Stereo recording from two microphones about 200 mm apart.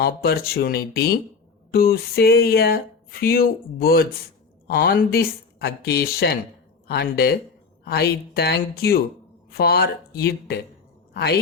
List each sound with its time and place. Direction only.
0.0 s speech: 50° left (ahead or behind)